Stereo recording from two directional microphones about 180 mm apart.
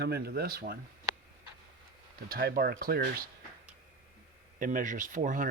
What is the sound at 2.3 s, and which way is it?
Speech, 60° right (ahead or behind).